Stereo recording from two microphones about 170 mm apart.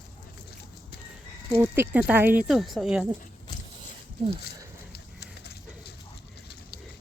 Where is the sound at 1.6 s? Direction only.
15° right (ahead or behind).